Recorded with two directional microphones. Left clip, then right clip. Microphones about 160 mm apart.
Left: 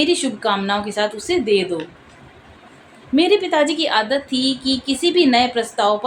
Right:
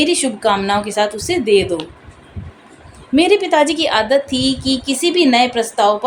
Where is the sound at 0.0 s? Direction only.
40° right (ahead or behind).